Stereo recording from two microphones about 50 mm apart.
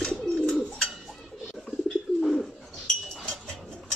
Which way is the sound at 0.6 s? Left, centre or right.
Centre.